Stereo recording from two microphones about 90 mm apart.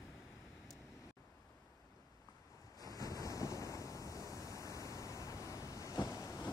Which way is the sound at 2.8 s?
40° left (ahead or behind).